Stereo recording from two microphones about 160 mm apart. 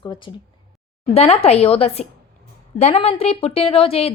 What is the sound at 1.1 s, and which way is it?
A woman's voice, 40° left (ahead or behind).